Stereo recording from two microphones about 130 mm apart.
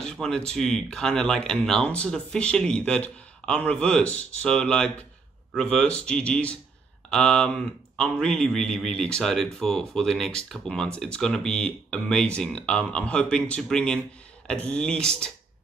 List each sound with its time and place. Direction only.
0.0 s speech: 5° left (ahead or behind)